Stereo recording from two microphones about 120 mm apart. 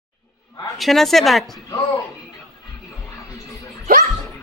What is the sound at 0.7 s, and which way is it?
Speech, centre (ahead or behind).